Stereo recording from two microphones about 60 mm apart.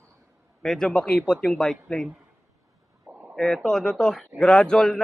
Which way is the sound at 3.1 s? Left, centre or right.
Right.